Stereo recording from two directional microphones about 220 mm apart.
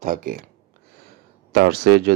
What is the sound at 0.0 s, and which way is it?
Speech, 40° right (ahead or behind).